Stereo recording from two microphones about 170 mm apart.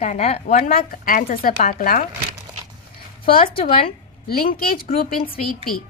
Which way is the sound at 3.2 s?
60° left (ahead or behind).